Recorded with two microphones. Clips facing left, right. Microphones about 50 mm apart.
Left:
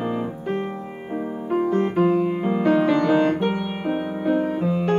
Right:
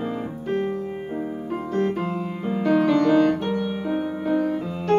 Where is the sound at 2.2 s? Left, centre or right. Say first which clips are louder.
Left 5 dB; left.